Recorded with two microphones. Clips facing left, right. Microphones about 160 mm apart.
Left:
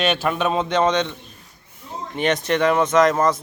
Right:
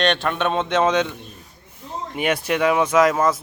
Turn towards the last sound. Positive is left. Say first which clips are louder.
# even
turn(degrees=-5)  # may be behind; listen again after turning